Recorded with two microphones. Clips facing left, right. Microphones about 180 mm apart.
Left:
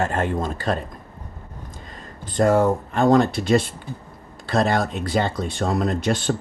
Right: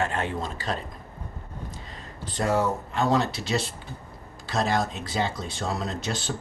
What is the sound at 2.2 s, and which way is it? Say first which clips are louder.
Speech: left 7 dB; 50° left (ahead or behind).